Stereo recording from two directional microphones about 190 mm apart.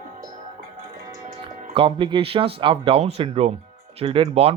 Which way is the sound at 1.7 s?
30° right (ahead or behind).